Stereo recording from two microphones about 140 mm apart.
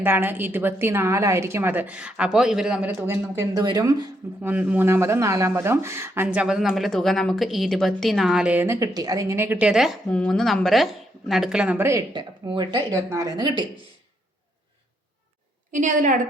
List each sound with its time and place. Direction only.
0.0 s speech: 15° right (ahead or behind)
3.1 s speech: 20° right (ahead or behind)
4.4 s speech: 10° right (ahead or behind)
8.6 s speech: 20° right (ahead or behind)
11.9 s speech: 25° right (ahead or behind)
15.7 s a woman's voice: 60° right (ahead or behind)